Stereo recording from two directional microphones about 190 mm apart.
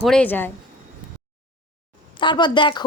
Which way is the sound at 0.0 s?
5° left (ahead or behind).